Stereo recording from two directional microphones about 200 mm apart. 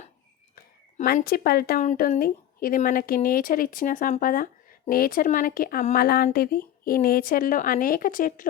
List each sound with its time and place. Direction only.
0.5 s speech: 45° left (ahead or behind)